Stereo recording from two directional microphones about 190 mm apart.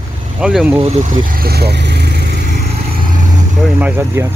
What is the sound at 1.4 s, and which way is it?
Speech, 55° right (ahead or behind).